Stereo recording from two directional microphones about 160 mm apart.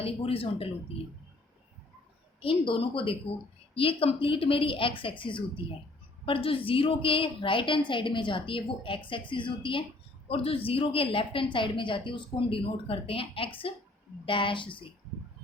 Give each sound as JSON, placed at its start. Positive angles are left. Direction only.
{"t": 0.0, "sound": "a woman's voice", "side_deg": 35}
{"t": 2.4, "sound": "a woman's voice", "side_deg": 35}